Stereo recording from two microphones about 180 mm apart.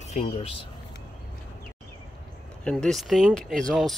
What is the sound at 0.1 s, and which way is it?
Speech, 35° left (ahead or behind).